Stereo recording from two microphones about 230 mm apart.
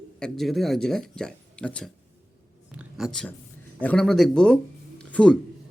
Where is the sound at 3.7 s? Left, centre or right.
Centre.